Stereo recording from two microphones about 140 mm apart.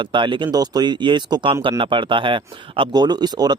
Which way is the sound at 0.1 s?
35° right (ahead or behind).